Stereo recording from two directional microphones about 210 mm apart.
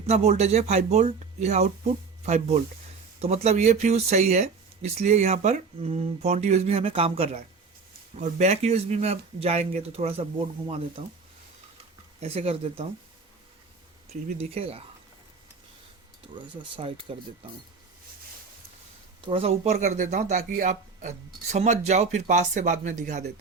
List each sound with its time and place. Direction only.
0.1 s speech: 30° right (ahead or behind)
3.2 s speech: 30° right (ahead or behind)
12.2 s speech: 30° right (ahead or behind)
14.1 s speech: 30° right (ahead or behind)
16.3 s speech: 25° right (ahead or behind)
19.2 s speech: 25° right (ahead or behind)